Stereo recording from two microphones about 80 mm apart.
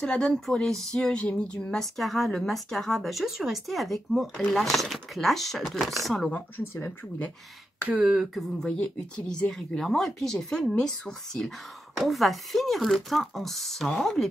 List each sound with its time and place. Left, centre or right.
0.0 s speech: centre
6.7 s speech: left
7.9 s speech: centre
8.7 s speech: centre